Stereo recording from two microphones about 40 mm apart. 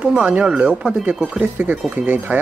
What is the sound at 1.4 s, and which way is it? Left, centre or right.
Speech, right.